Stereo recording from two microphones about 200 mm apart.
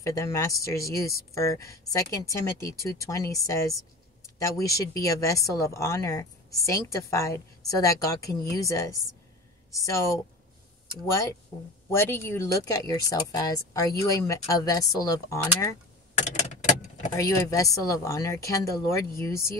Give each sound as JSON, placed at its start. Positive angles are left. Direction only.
{"t": 0.0, "sound": "speech", "side_deg": 15}
{"t": 16.2, "sound": "vehicle", "side_deg": 35}
{"t": 17.1, "sound": "speech", "side_deg": 15}